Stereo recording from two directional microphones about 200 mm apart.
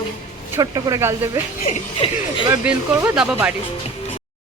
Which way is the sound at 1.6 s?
30° left (ahead or behind).